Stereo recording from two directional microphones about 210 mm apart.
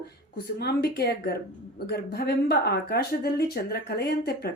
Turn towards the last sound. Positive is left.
turn(degrees=50)  # may be behind; listen again after turning